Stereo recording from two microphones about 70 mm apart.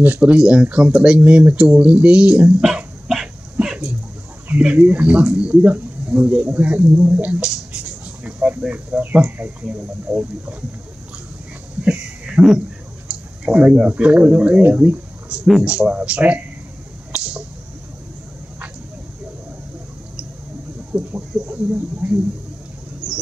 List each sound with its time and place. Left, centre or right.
0.2 s speech: centre
2.6 s dog: centre
4.5 s speech: right
11.8 s a sound: centre
13.5 s speech: centre
17.1 s squish: centre
20.9 s a sound: right
22.0 s speech: right